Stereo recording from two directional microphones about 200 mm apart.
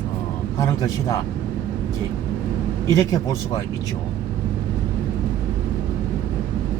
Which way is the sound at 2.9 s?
15° left (ahead or behind).